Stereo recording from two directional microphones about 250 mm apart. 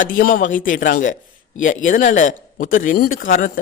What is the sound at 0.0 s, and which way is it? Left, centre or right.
A man's voice, left.